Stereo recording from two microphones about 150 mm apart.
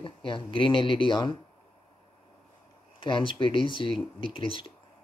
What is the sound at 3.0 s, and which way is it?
Speech, 35° left (ahead or behind).